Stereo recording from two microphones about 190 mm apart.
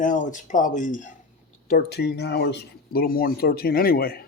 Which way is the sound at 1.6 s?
55° left (ahead or behind).